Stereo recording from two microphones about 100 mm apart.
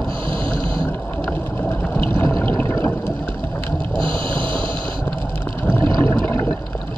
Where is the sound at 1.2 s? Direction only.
15° left (ahead or behind).